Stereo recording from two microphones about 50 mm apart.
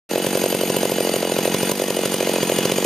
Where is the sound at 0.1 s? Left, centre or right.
Centre.